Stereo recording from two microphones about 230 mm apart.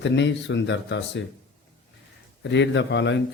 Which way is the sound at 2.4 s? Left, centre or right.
Left.